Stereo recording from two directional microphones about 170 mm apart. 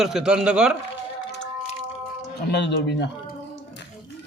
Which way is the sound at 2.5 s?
85° left.